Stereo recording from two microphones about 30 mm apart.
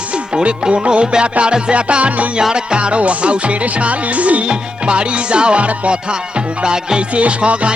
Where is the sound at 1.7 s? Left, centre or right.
Right.